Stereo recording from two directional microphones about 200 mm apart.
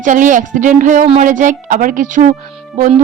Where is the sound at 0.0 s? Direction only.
40° right (ahead or behind).